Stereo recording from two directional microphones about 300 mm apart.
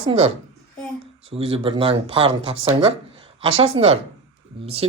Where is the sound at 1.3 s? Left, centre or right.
Centre.